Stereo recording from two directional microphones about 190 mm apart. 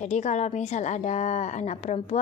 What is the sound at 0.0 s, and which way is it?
A woman's voice, 40° left (ahead or behind).